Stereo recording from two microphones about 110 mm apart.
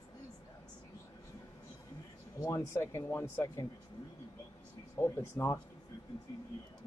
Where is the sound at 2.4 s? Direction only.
25° left (ahead or behind).